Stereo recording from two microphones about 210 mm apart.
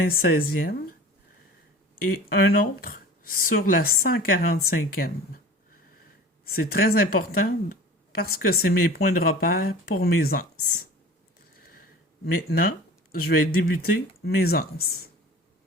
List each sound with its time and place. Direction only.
0.0 s speech: 45° left (ahead or behind)
2.3 s speech: 45° left (ahead or behind)
6.4 s speech: 45° left (ahead or behind)
11.3 s a sound: 45° left (ahead or behind)
12.2 s speech: 50° left (ahead or behind)